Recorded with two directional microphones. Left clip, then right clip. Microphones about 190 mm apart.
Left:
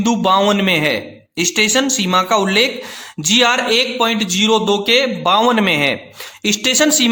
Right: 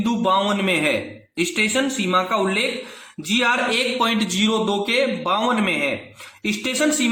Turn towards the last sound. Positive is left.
turn(degrees=45)  # may be behind; listen again after turning